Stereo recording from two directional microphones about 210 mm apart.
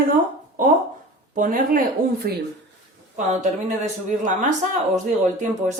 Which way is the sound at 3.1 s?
35° right (ahead or behind).